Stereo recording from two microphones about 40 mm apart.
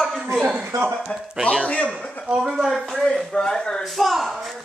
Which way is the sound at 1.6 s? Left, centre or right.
Left.